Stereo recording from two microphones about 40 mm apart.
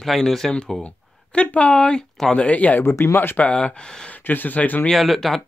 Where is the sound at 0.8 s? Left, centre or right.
Left.